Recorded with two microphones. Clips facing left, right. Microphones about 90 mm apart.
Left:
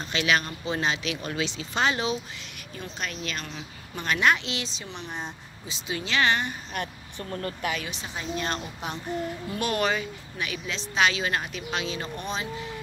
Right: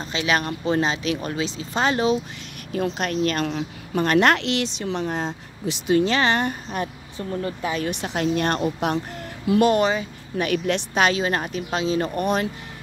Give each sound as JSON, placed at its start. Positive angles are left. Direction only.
{"t": 0.0, "sound": "speech", "side_deg": -30}
{"t": 0.4, "sound": "speech", "side_deg": -40}
{"t": 2.7, "sound": "speech", "side_deg": -70}
{"t": 3.1, "sound": "a woman's voice", "side_deg": -50}
{"t": 4.2, "sound": "speech", "side_deg": -65}
{"t": 5.9, "sound": "speech", "side_deg": -40}
{"t": 6.7, "sound": "speech", "side_deg": -20}
{"t": 7.9, "sound": "speech", "side_deg": -65}
{"t": 9.7, "sound": "speech", "side_deg": -25}
{"t": 10.3, "sound": "speech", "side_deg": -50}
{"t": 12.2, "sound": "speech", "side_deg": -55}